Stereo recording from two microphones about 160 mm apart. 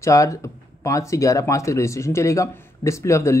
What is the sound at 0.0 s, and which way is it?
Speech, 20° left (ahead or behind).